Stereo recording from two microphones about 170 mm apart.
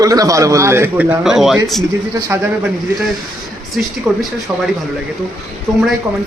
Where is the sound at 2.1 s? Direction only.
15° right (ahead or behind).